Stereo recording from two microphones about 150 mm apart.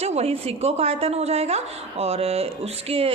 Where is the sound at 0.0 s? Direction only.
45° right (ahead or behind).